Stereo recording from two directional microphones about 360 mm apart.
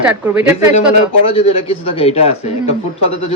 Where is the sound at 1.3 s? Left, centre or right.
Centre.